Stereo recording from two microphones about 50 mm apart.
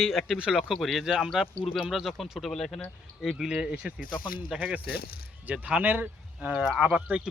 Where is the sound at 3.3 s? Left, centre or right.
Centre.